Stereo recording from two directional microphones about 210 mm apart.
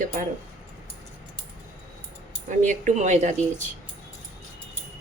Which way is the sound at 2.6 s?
35° right (ahead or behind).